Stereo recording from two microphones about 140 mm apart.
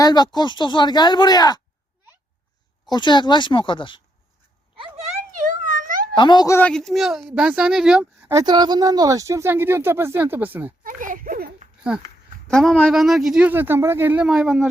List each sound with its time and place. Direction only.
0.0 s speech: 30° left (ahead or behind)
2.9 s speech: 30° left (ahead or behind)
4.8 s a sound: 50° right (ahead or behind)
5.7 s a sound: 85° right
6.1 s speech: 30° left (ahead or behind)
6.7 s speech: 5° left (ahead or behind)
8.4 s speech: 30° right (ahead or behind); by 10.7 s 15° right (ahead or behind)
10.8 s speech: 75° right (ahead or behind)
12.5 s speech: 5° left (ahead or behind)